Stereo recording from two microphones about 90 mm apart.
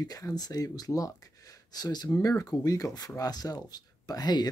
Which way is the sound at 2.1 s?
35° left (ahead or behind).